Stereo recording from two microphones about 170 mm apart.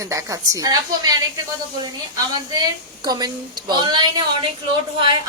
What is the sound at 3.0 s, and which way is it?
A woman's voice, 25° right (ahead or behind).